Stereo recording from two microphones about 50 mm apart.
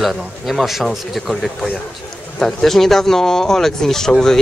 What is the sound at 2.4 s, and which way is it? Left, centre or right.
Speech, centre.